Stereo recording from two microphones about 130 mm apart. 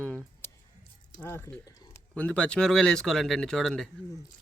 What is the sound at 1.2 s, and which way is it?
Speech, 20° left (ahead or behind).